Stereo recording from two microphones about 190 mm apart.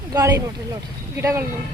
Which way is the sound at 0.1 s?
20° right (ahead or behind).